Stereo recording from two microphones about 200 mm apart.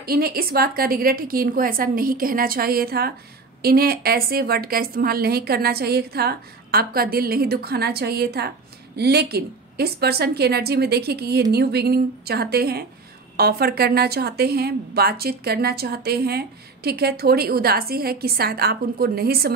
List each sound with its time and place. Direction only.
0.0 s a woman's voice: 50° right (ahead or behind)